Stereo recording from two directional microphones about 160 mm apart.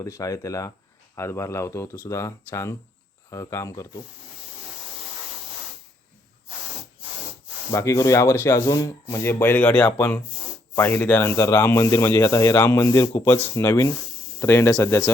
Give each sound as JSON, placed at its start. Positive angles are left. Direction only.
{"t": 0.0, "sound": "speech", "side_deg": 20}
{"t": 7.7, "sound": "speech", "side_deg": 20}